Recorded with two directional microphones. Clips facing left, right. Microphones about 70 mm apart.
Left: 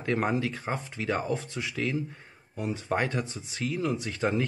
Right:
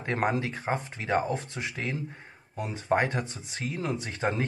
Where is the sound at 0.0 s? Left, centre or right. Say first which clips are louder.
Even; right.